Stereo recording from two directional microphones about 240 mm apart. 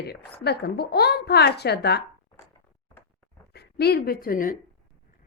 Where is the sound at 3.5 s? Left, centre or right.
Left.